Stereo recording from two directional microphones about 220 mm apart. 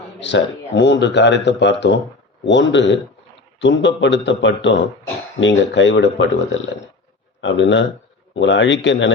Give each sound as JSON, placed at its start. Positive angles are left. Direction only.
{"t": 0.2, "sound": "speech", "side_deg": 55}